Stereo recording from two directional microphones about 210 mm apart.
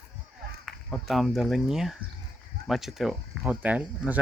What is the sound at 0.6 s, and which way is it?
Speech, centre (ahead or behind).